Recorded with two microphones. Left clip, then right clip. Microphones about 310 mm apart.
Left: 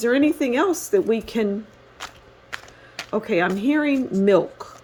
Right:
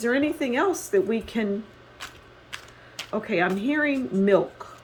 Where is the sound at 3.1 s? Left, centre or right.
Left.